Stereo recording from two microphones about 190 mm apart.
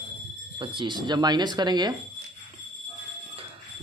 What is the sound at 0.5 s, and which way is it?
Speech, 25° right (ahead or behind).